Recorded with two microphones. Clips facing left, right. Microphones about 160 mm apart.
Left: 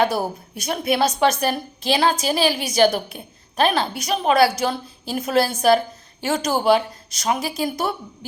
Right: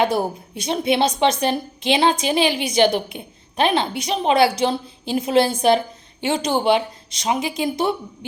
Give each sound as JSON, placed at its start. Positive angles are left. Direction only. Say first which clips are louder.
{"t": 0.0, "sound": "a woman's voice", "louder": "right 1 dB", "side_deg": -20}